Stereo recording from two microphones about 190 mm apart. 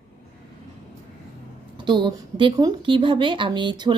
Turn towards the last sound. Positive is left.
turn(degrees=-25)  # may be behind; listen again after turning